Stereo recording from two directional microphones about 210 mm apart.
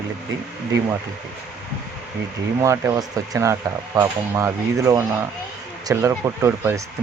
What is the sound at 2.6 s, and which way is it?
Speech, 15° right (ahead or behind).